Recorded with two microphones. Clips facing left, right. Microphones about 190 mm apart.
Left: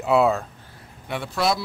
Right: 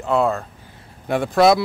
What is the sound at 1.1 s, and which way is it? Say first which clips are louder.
Speech: right 9 dB; 50° right (ahead or behind).